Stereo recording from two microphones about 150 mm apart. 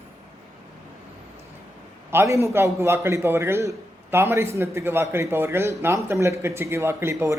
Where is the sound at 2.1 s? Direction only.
15° right (ahead or behind).